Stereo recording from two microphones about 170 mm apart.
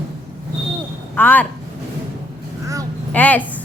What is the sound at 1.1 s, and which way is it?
Speech, 10° left (ahead or behind).